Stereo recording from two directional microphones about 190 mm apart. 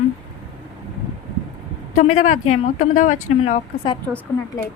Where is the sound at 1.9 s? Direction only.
40° left (ahead or behind).